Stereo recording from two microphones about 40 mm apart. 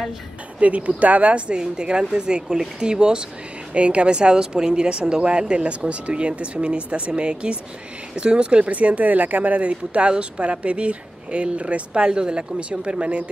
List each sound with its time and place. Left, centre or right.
0.6 s speech: right
1.6 s speech: right
8.7 s speech: right
9.7 s speech: right